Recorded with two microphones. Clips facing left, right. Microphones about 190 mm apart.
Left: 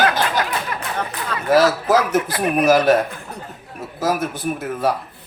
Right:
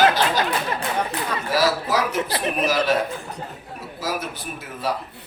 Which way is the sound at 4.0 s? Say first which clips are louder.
Left 7 dB; 50° left (ahead or behind).